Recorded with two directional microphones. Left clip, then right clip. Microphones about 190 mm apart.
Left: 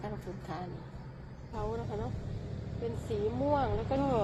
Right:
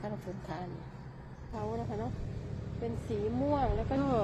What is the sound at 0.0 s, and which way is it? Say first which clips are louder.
A woman's voice: right 1 dB; 5° right (ahead or behind).